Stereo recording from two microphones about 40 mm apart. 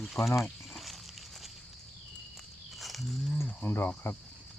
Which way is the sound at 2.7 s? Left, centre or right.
Centre.